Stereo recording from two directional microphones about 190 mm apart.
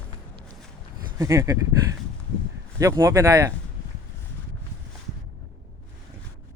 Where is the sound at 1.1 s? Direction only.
15° right (ahead or behind).